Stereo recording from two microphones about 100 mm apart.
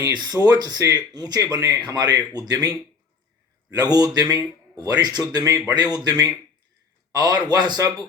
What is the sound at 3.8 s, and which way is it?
Speech, 40° right (ahead or behind).